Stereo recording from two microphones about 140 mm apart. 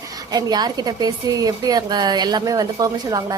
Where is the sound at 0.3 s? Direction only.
25° right (ahead or behind).